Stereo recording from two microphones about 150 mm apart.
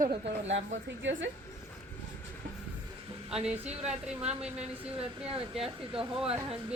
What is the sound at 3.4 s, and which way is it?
Speech, 10° right (ahead or behind).